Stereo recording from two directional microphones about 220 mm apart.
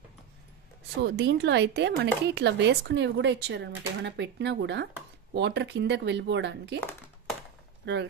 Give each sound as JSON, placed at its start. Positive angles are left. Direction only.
{"t": 1.0, "sound": "speech", "side_deg": -50}
{"t": 7.8, "sound": "speech", "side_deg": -50}